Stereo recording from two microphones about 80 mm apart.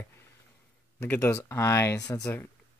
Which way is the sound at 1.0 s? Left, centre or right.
Left.